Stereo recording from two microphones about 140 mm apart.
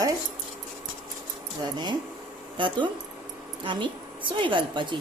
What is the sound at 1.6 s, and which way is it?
A woman's voice, 30° right (ahead or behind).